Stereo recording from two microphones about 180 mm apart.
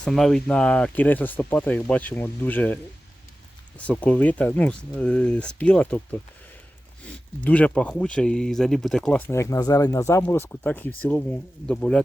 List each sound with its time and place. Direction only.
0.0 s speech: centre (ahead or behind)
3.8 s speech: 5° left (ahead or behind)